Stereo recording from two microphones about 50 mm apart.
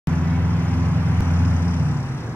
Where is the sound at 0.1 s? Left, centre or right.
Left.